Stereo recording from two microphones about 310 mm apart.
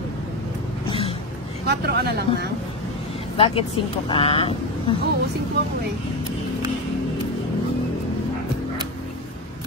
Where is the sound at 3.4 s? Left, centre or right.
Centre.